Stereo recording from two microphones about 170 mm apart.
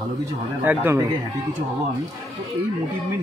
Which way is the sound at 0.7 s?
10° right (ahead or behind).